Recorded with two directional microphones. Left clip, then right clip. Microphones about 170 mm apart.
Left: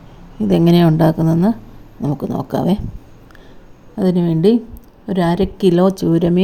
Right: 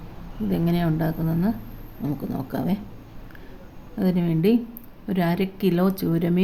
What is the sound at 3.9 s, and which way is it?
Speech, 30° left (ahead or behind).